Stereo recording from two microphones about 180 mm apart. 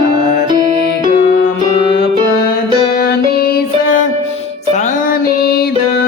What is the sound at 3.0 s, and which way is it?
Music, 60° left (ahead or behind).